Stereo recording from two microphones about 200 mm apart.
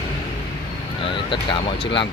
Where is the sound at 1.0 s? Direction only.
25° left (ahead or behind).